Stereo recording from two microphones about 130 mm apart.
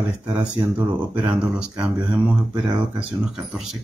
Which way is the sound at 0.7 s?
10° right (ahead or behind).